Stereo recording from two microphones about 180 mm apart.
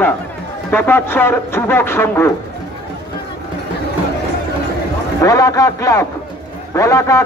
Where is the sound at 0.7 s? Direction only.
10° left (ahead or behind).